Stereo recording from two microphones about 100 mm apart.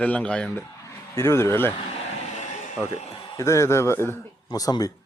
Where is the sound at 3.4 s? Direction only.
30° left (ahead or behind).